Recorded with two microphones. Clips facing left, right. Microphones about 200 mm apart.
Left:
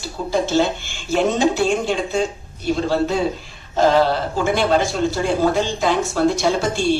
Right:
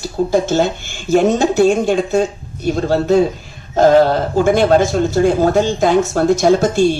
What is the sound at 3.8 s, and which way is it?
Speech, 50° right (ahead or behind).